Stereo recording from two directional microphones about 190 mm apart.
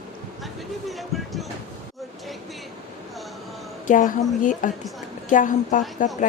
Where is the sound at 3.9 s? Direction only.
40° left (ahead or behind).